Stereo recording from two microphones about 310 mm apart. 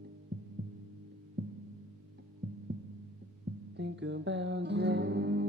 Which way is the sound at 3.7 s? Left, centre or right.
Right.